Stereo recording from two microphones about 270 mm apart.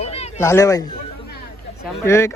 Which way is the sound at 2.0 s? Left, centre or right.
Centre.